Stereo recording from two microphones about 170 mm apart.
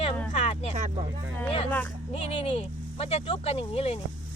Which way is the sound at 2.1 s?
35° left (ahead or behind).